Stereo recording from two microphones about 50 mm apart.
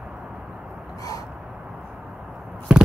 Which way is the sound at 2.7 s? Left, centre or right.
Centre.